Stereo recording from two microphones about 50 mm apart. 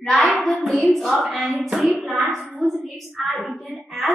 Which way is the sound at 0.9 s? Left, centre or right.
Centre.